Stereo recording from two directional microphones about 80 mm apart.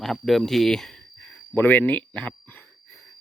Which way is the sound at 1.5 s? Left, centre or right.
Left.